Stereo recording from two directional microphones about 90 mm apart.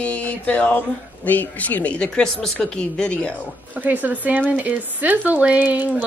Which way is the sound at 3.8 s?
20° right (ahead or behind).